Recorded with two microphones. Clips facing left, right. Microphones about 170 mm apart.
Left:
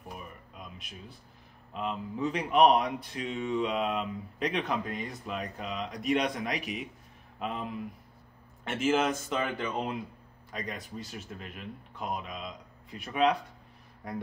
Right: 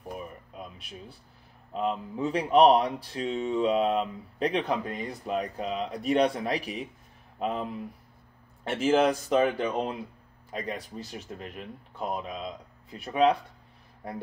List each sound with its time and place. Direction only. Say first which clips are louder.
0.6 s a sound: right 4 dB; 30° right (ahead or behind)
1.7 s speech: right 5 dB; 35° right (ahead or behind)
8.6 s speech: right 4 dB; 35° right (ahead or behind)